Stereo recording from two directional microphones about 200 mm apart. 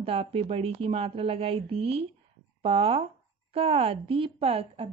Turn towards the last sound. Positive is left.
turn(degrees=-30)  # may be behind; listen again after turning